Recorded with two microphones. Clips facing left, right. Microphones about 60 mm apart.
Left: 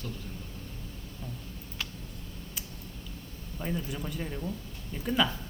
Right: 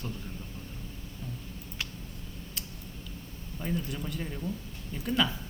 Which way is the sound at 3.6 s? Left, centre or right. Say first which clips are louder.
Even; centre.